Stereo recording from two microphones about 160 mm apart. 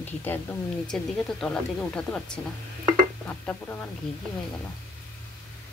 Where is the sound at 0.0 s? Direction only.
10° left (ahead or behind).